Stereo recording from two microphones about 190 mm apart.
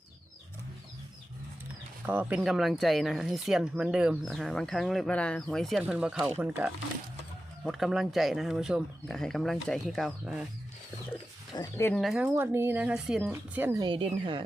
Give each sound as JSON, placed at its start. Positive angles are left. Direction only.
{"t": 2.0, "sound": "speech", "side_deg": -10}
{"t": 7.6, "sound": "speech", "side_deg": 0}
{"t": 11.5, "sound": "speech", "side_deg": 15}
{"t": 11.9, "sound": "speech", "side_deg": 0}
{"t": 13.8, "sound": "speech", "side_deg": -25}